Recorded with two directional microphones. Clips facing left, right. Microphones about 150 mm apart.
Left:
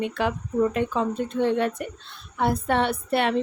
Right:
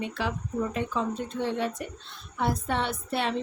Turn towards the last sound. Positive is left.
turn(degrees=60)  # may be behind; listen again after turning